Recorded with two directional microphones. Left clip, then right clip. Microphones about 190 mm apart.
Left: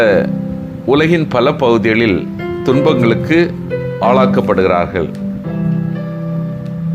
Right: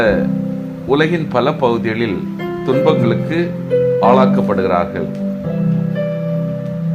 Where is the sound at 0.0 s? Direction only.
30° left (ahead or behind).